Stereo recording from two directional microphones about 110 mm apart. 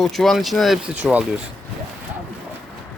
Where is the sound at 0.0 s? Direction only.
Centre (ahead or behind).